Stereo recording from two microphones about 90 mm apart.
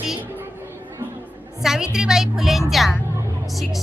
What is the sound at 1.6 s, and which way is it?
A woman's voice, 5° right (ahead or behind).